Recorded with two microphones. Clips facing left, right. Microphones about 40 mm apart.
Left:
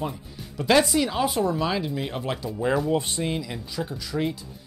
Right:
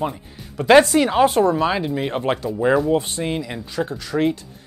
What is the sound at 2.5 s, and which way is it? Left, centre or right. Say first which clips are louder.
Speech: right 5 dB; centre.